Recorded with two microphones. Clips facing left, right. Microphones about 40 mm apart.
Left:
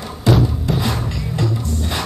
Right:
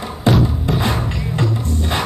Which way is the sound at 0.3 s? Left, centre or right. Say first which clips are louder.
Even; centre.